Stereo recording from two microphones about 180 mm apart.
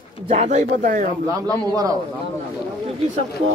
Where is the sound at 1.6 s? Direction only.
20° right (ahead or behind).